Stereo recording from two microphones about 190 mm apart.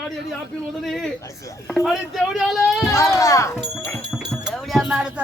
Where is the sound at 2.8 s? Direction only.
15° left (ahead or behind).